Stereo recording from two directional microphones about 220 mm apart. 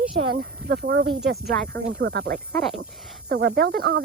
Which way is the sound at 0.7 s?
50° right (ahead or behind).